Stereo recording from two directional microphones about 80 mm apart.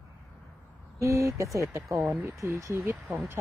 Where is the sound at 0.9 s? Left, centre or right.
Right.